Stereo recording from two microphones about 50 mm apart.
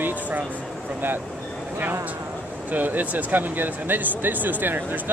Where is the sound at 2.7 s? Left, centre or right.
Right.